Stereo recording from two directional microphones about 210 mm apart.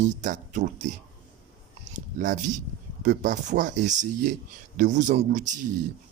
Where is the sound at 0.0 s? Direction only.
35° right (ahead or behind).